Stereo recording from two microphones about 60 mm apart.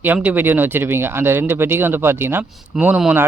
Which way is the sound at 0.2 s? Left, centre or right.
Right.